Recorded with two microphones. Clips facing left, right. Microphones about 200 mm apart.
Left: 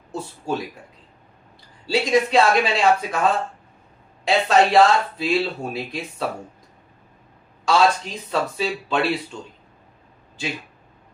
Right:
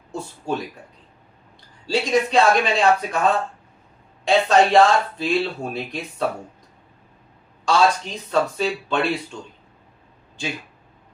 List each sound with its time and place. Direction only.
0.1 s speech: 5° left (ahead or behind)
1.9 s speech: 5° left (ahead or behind)
4.3 s speech: centre (ahead or behind)
7.6 s speech: 5° left (ahead or behind)